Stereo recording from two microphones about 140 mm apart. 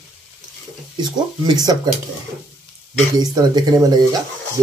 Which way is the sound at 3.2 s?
30° right (ahead or behind).